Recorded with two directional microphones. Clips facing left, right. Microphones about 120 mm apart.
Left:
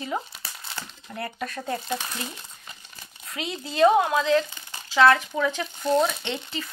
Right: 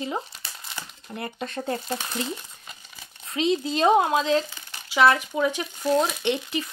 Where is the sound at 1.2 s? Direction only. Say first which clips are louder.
Left 1 dB; 25° right (ahead or behind).